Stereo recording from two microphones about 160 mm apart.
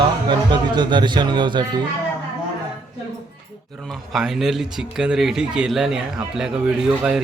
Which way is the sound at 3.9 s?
Centre (ahead or behind).